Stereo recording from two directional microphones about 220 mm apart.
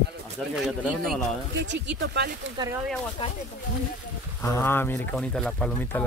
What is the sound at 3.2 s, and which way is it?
Speech, 25° left (ahead or behind).